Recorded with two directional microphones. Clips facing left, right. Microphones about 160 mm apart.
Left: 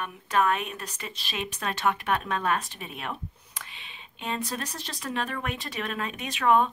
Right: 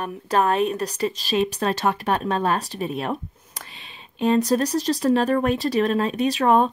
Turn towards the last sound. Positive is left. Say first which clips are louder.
# right 5 dB
turn(degrees=-35)  # may be behind; listen again after turning